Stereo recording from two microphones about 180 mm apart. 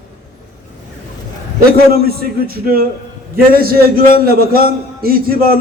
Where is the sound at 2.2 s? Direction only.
55° right (ahead or behind).